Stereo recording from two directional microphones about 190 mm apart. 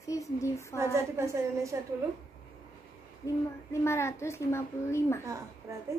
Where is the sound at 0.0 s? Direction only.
15° left (ahead or behind).